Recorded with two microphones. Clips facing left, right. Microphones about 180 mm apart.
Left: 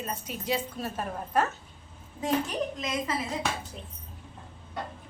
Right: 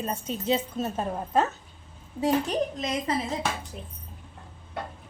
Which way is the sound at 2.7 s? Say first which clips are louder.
Right 2 dB; 30° right (ahead or behind).